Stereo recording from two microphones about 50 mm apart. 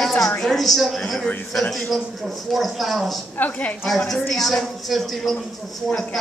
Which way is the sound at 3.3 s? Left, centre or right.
Left.